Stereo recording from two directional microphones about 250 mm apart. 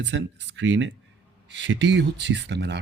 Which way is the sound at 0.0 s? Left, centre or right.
Right.